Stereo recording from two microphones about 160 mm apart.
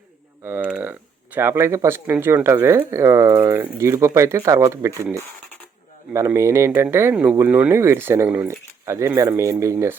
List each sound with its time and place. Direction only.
0.4 s speech: 10° right (ahead or behind)
6.1 s speech: 20° right (ahead or behind)